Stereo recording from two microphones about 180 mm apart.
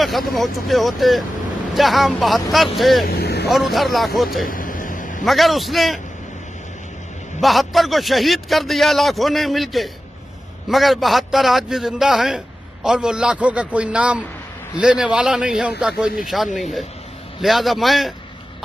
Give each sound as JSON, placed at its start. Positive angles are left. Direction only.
{"t": 0.0, "sound": "a man's voice", "side_deg": 0}
{"t": 3.1, "sound": "speech", "side_deg": 60}
{"t": 3.4, "sound": "a man's voice", "side_deg": 0}
{"t": 4.5, "sound": "a sound", "side_deg": 50}
{"t": 5.2, "sound": "a man's voice", "side_deg": 0}
{"t": 7.3, "sound": "a man's voice", "side_deg": 0}